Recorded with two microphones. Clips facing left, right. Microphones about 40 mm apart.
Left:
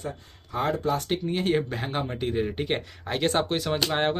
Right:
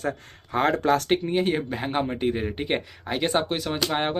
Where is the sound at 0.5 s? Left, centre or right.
Right.